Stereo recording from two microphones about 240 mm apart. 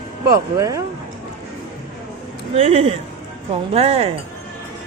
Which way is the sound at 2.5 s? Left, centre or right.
Right.